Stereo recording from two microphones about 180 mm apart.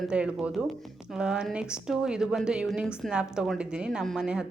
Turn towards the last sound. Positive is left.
turn(degrees=-5)  # may be behind; listen again after turning